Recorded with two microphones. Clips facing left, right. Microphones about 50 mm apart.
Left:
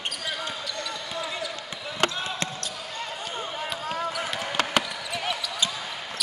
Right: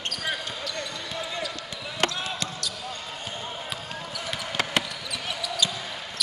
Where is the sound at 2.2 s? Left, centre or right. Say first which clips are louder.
Left 1 dB; left.